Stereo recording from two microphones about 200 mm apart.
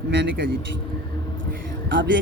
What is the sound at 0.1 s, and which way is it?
Speech, 65° right (ahead or behind).